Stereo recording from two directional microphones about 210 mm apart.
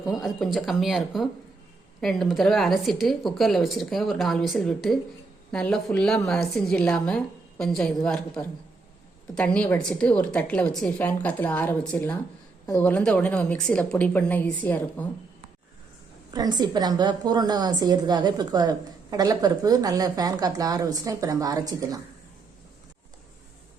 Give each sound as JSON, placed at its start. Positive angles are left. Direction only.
{"t": 0.0, "sound": "a woman's voice", "side_deg": 0}
{"t": 16.3, "sound": "a woman's voice", "side_deg": -20}